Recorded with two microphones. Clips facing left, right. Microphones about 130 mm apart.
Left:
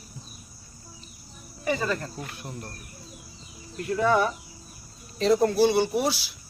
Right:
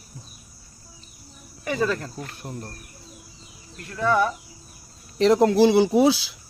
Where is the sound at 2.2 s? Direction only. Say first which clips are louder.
Right 1 dB; 40° right (ahead or behind).